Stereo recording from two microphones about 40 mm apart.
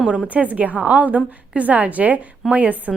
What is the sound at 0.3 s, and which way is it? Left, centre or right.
A woman's voice, right.